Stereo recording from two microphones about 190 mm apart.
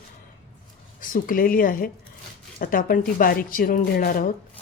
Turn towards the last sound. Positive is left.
turn(degrees=50)  # may be behind; listen again after turning